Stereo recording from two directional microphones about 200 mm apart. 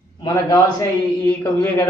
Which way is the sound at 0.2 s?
15° left (ahead or behind).